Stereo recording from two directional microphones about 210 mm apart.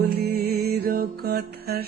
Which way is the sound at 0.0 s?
50° right (ahead or behind).